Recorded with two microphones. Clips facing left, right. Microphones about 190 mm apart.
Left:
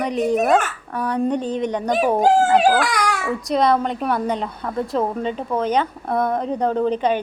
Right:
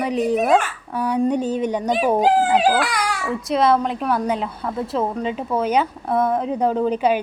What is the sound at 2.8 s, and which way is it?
Speech, 45° left (ahead or behind).